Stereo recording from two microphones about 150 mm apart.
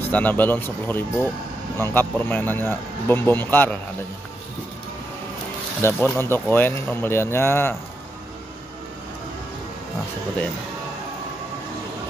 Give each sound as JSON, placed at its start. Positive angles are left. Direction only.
{"t": 0.1, "sound": "speech", "side_deg": 10}
{"t": 5.8, "sound": "speech", "side_deg": 15}